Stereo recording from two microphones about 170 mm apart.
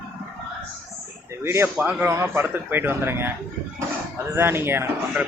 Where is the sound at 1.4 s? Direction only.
15° right (ahead or behind).